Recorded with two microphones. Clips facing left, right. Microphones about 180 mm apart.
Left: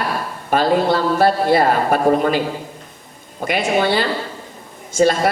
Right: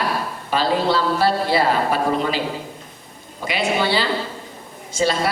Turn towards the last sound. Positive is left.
turn(degrees=50)  # may be behind; listen again after turning